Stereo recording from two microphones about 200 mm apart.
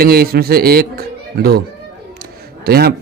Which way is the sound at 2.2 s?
50° right (ahead or behind).